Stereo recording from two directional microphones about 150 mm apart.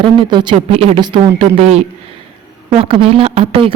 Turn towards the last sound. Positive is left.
turn(degrees=-40)  # may be behind; listen again after turning